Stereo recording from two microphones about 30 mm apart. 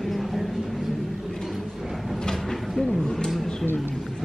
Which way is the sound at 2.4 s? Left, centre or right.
Centre.